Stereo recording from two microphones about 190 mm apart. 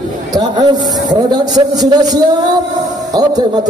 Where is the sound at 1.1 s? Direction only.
20° right (ahead or behind).